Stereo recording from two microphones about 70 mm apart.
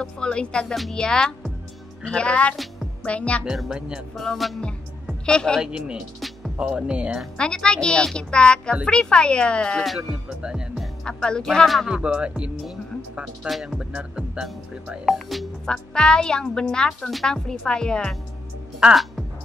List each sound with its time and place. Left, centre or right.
0.0 s a woman's voice: centre
3.4 s music: centre
4.2 s music: centre
5.2 s a woman's voice: centre
5.6 s music: centre
7.3 s a woman's voice: centre
9.8 s music: centre
11.1 s a woman's voice: centre
11.9 s music: centre
13.5 s music: centre
13.7 s music: centre
15.0 s a woman's voice: centre
18.8 s music: centre